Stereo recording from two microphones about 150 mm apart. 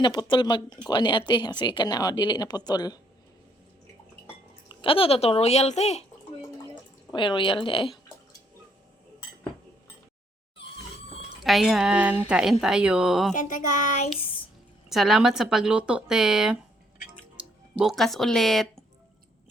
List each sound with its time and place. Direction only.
0.0 s a woman's voice: 30° left (ahead or behind)
4.7 s speech: 35° left (ahead or behind)
7.1 s speech: 35° left (ahead or behind)
11.4 s a woman's voice: centre (ahead or behind)
13.3 s a sound: 60° left (ahead or behind)
14.8 s a woman's voice: centre (ahead or behind)